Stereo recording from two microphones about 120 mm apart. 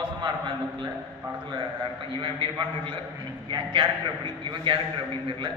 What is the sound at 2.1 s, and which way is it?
A man's voice, 45° right (ahead or behind).